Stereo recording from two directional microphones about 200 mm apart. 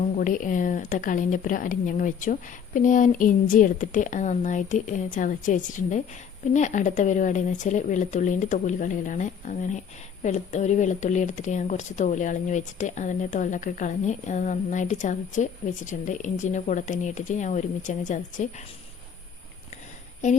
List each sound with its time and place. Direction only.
0.2 s speech: 40° left (ahead or behind)